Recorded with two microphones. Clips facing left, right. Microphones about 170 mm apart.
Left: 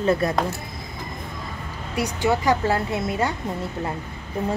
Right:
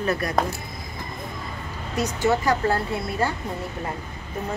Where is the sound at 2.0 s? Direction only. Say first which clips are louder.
Even; 15° left (ahead or behind).